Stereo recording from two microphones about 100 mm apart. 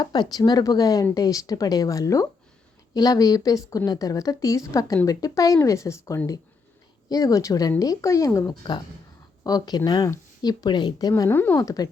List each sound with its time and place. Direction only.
0.0 s a woman's voice: 45° left (ahead or behind); by 8.5 s 30° left (ahead or behind)
9.4 s a woman's voice: 40° left (ahead or behind)
11.3 s speech: 20° left (ahead or behind)
11.6 s a woman's voice: 35° left (ahead or behind)